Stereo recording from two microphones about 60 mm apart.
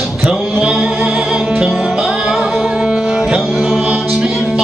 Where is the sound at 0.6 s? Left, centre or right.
Centre.